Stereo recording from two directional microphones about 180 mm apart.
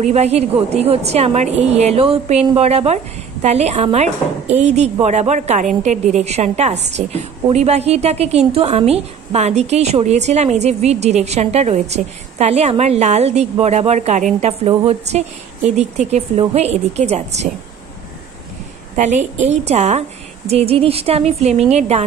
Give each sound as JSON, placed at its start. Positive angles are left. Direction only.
{"t": 0.0, "sound": "a woman's voice", "side_deg": -35}
{"t": 14.7, "sound": "a woman's voice", "side_deg": -25}
{"t": 15.1, "sound": "a woman's voice", "side_deg": -40}
{"t": 18.9, "sound": "a woman's voice", "side_deg": -40}